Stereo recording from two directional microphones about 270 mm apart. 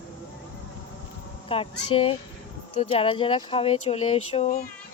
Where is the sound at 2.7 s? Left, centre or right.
Centre.